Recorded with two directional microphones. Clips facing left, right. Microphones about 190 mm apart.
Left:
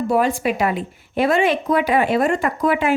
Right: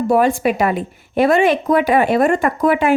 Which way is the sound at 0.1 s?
50° right (ahead or behind).